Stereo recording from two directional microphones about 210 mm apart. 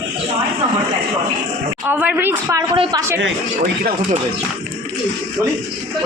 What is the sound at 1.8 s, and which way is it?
Speech, 10° right (ahead or behind).